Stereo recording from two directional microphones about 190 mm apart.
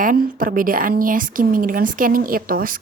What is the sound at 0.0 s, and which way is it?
A woman's voice, 45° right (ahead or behind).